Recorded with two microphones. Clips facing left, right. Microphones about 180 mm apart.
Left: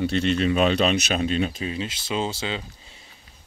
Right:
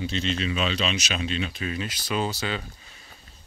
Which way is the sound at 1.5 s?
25° left (ahead or behind).